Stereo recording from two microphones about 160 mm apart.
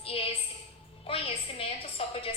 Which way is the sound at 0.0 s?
35° left (ahead or behind).